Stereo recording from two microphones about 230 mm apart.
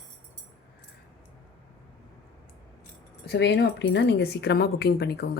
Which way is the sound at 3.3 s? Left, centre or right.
Left.